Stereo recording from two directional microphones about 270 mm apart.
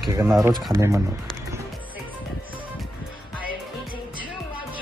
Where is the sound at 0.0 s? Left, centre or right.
Centre.